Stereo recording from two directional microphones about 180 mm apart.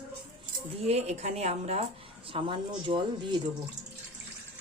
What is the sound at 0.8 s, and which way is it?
Speech, 35° right (ahead or behind).